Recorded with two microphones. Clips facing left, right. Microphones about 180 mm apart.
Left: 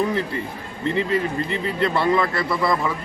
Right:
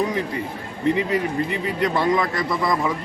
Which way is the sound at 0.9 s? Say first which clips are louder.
Right 1 dB; 15° right (ahead or behind).